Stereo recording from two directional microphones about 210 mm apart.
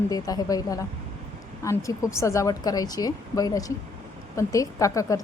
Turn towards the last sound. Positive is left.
turn(degrees=15)  # may be behind; listen again after turning